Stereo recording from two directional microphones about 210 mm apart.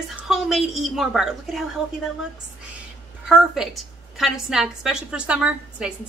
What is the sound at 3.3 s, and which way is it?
A woman's voice, centre (ahead or behind).